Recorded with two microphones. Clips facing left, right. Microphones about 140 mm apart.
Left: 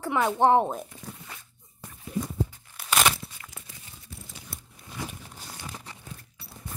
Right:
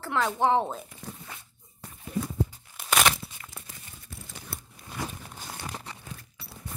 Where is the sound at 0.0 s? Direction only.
15° left (ahead or behind).